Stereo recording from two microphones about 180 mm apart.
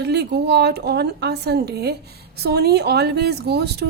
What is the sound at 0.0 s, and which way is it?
A woman's voice, 65° right (ahead or behind).